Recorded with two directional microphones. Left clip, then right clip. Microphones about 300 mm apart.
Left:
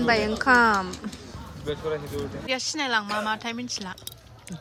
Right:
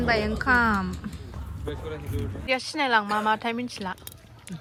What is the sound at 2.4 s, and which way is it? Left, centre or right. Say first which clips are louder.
Speech: right 3 dB; centre.